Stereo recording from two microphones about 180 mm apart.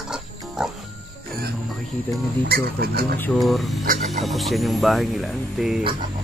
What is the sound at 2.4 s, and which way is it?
Speech, 60° right (ahead or behind).